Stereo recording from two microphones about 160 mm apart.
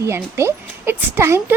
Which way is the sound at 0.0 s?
15° right (ahead or behind).